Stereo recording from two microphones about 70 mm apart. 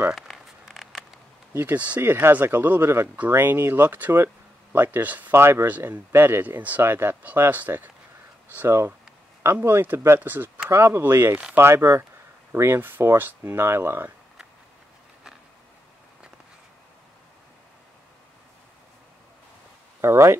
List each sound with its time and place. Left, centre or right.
0.1 s a sound: centre
1.5 s speech: right
6.4 s speech: right
6.8 s speech: right
8.6 s speech: right
10.2 s speech: right
20.0 s speech: right